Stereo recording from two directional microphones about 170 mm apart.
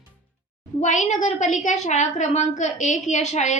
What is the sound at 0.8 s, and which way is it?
A woman's voice, 45° left (ahead or behind).